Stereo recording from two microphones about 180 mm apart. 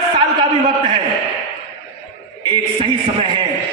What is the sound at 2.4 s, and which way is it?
Speech, 25° right (ahead or behind).